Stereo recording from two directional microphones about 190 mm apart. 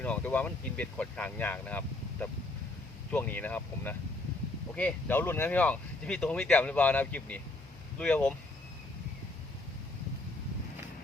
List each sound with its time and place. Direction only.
0.0 s speech: 10° left (ahead or behind)